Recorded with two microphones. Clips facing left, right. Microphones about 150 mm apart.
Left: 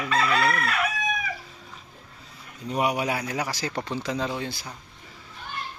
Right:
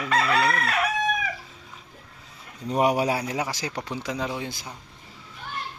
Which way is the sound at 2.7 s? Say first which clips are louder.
Right 3 dB; 40° right (ahead or behind).